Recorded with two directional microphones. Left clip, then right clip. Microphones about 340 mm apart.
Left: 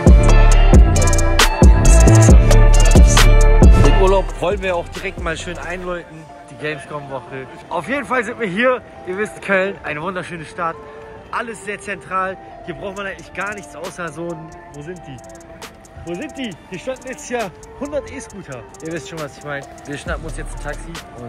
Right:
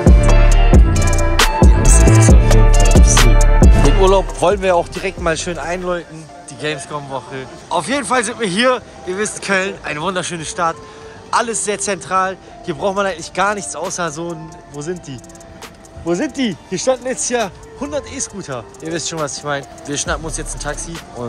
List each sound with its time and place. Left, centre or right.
0.0 s music: centre
6.6 s a man's voice: centre
14.9 s speech: right
16.2 s speech: right
16.8 s a man's voice: centre
17.3 s a man's voice: centre